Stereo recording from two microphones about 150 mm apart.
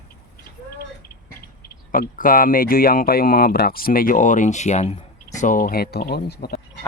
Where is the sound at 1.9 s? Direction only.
70° left (ahead or behind); by 4.9 s 50° left (ahead or behind).